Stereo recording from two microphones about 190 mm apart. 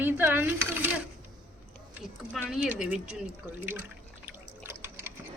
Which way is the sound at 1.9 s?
5° right (ahead or behind).